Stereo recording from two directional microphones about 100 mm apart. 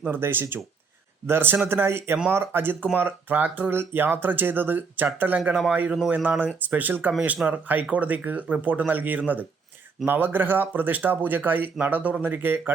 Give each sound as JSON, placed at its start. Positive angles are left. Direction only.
{"t": 0.0, "sound": "speech", "side_deg": -20}